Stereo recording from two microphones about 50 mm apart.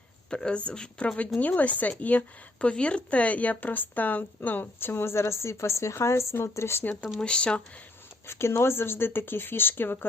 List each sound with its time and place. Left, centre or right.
0.3 s speech: centre; by 6.8 s left
7.2 s speech: centre
8.3 s speech: left